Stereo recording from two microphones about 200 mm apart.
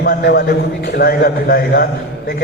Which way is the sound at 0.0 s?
55° left (ahead or behind).